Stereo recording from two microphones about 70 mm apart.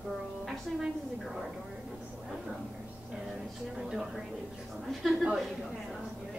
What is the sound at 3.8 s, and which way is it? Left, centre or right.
A woman's voice, centre.